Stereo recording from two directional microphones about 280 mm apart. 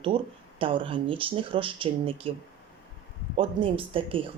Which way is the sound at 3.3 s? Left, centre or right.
Centre.